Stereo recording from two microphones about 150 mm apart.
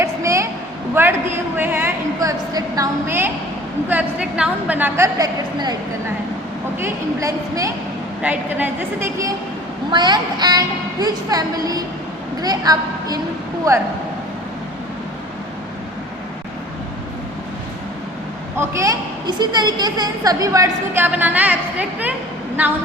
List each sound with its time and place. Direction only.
0.0 s a sound: 20° right (ahead or behind)
2.5 s a woman's voice: 25° right (ahead or behind)
6.7 s a woman's voice: 20° right (ahead or behind)
8.2 s a woman's voice: 10° right (ahead or behind)
9.9 s a woman's voice: 30° right (ahead or behind)
18.5 s a woman's voice: 15° right (ahead or behind)